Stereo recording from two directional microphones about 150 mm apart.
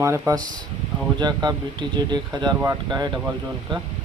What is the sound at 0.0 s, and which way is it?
Speech, 20° right (ahead or behind).